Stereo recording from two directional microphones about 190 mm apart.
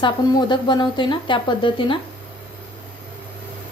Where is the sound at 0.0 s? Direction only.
25° left (ahead or behind).